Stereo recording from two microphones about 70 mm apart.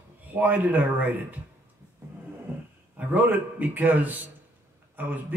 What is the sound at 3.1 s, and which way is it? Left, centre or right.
Speech, right.